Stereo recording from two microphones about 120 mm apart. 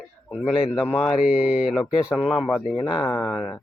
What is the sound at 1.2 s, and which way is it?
Speech, 10° right (ahead or behind).